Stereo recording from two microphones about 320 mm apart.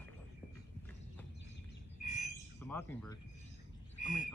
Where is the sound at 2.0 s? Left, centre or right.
Left.